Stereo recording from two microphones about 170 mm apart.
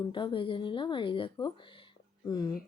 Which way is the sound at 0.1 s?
30° left (ahead or behind).